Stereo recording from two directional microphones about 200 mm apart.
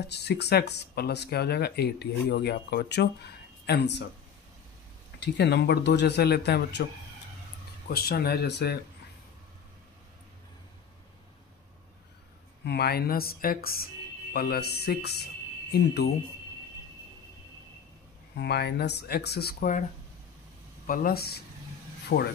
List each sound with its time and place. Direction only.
0.1 s speech: 55° left (ahead or behind)
5.2 s speech: 55° left (ahead or behind)
7.9 s speech: 50° left (ahead or behind)
12.6 s speech: 55° left (ahead or behind)
18.3 s speech: 55° left (ahead or behind)
20.8 s speech: 45° left (ahead or behind)